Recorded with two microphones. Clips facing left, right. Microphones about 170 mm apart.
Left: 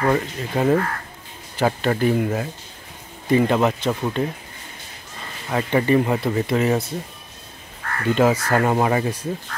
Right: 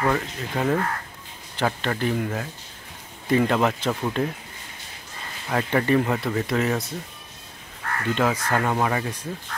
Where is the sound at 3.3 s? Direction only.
5° left (ahead or behind).